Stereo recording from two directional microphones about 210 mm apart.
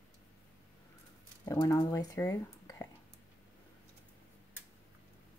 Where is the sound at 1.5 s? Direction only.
20° left (ahead or behind).